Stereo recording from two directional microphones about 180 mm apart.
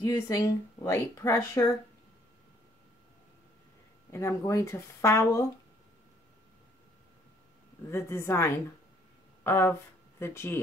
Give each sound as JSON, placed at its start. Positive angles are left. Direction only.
{"t": 0.0, "sound": "speech", "side_deg": 20}
{"t": 4.1, "sound": "speech", "side_deg": 15}
{"t": 7.9, "sound": "speech", "side_deg": 15}